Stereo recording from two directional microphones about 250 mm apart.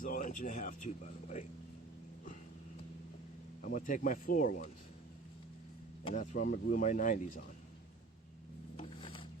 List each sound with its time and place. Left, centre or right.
0.0 s speech: left
3.6 s speech: left
6.1 s speech: left
8.7 s a sound: left